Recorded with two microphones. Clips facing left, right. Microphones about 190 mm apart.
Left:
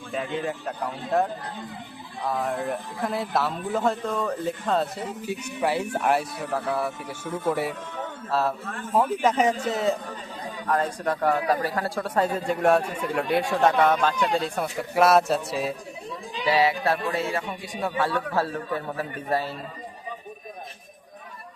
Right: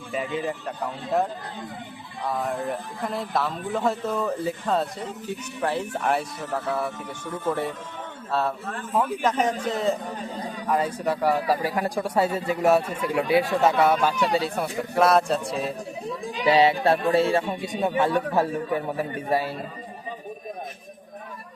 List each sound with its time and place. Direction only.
0.1 s a man's voice: 5° right (ahead or behind)
16.5 s speech: 25° right (ahead or behind)